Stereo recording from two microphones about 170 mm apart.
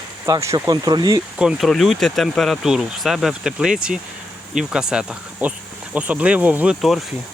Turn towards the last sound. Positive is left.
turn(degrees=-5)  # may be behind; listen again after turning